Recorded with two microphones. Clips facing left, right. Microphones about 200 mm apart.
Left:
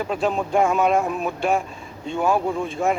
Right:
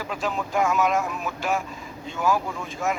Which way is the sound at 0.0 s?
30° left (ahead or behind).